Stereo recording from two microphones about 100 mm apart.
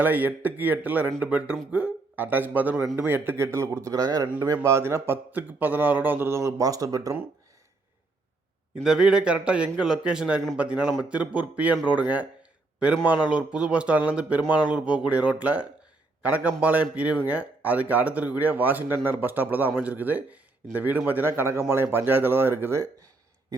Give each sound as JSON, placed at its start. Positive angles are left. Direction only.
{"t": 0.0, "sound": "speech", "side_deg": -20}
{"t": 4.6, "sound": "speech", "side_deg": -30}
{"t": 8.8, "sound": "speech", "side_deg": -5}